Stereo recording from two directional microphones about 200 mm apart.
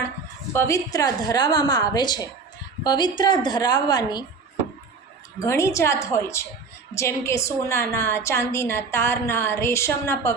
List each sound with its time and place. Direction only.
0.5 s a woman's voice: 15° left (ahead or behind)
5.4 s a woman's voice: 15° left (ahead or behind)